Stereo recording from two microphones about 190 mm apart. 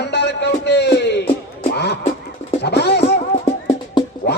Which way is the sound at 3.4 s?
30° left (ahead or behind).